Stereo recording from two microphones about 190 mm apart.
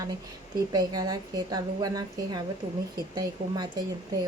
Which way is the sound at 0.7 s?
20° right (ahead or behind).